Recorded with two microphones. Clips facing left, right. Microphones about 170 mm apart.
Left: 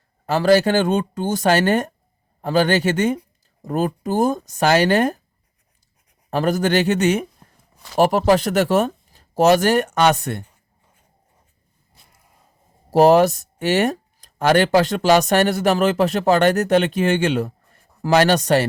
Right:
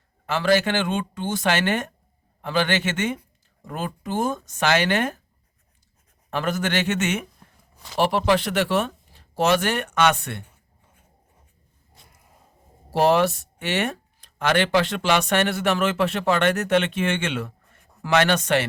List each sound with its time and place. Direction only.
0.3 s speech: 40° left (ahead or behind)
6.3 s speech: 35° left (ahead or behind)
12.9 s speech: 40° left (ahead or behind)